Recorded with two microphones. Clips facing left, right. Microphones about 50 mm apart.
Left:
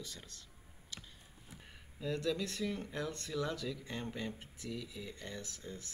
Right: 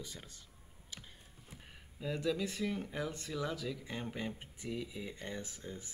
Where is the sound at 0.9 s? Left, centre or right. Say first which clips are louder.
Left 1 dB; centre.